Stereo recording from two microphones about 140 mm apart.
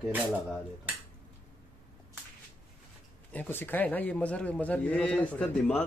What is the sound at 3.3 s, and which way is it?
A man's voice, 10° left (ahead or behind).